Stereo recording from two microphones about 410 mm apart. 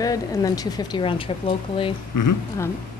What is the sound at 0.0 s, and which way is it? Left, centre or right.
Speech, centre.